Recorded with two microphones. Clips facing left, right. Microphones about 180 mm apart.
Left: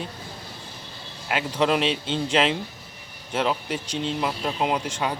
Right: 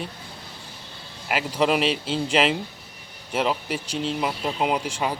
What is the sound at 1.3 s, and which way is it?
Speech, 5° right (ahead or behind).